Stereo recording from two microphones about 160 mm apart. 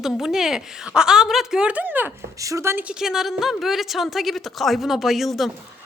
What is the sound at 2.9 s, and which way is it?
Speech, 5° right (ahead or behind).